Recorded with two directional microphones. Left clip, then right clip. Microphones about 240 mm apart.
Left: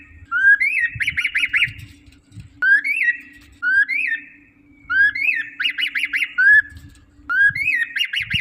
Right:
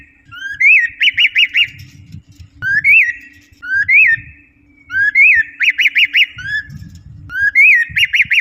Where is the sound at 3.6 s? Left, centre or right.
Centre.